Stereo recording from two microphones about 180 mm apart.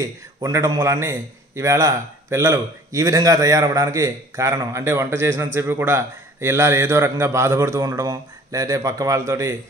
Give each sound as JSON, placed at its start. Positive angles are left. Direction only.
{"t": 0.0, "sound": "a man's voice", "side_deg": -15}